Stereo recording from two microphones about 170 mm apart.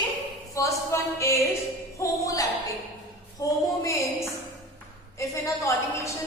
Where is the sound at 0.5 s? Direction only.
20° left (ahead or behind).